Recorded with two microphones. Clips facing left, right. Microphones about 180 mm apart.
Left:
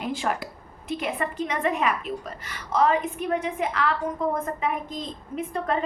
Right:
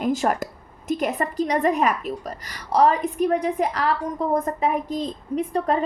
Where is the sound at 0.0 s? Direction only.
45° right (ahead or behind).